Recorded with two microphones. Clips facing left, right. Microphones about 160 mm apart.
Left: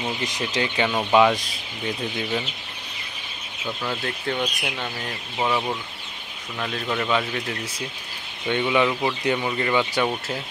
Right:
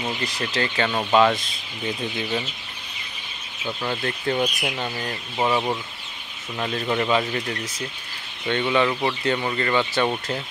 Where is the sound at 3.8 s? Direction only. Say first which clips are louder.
Right 3 dB; 5° right (ahead or behind).